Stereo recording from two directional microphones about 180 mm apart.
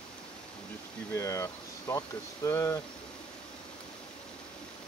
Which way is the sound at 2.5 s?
15° left (ahead or behind).